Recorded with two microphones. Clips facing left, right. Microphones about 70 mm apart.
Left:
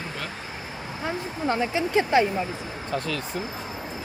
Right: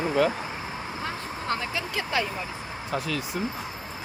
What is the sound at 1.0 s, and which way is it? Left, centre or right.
Speech, left.